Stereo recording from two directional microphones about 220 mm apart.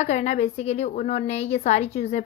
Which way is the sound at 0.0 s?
30° left (ahead or behind).